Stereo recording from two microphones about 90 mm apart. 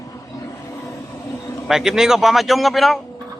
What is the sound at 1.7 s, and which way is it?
Speech, 5° right (ahead or behind).